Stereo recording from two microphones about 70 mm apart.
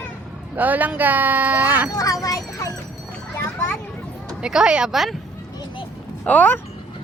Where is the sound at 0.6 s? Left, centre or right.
Right.